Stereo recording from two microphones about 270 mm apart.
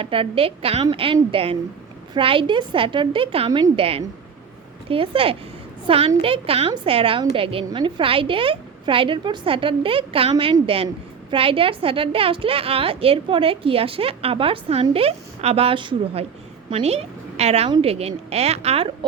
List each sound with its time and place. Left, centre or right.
0.0 s a woman's voice: centre